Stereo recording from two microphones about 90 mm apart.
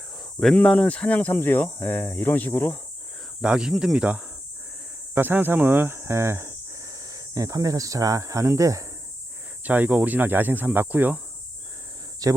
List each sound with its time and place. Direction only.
0.3 s speech: 5° left (ahead or behind); by 2.7 s 25° left (ahead or behind)
3.4 s speech: 10° right (ahead or behind); by 8.9 s 35° right (ahead or behind)
9.6 s speech: 20° right (ahead or behind)
12.2 s speech: 40° right (ahead or behind)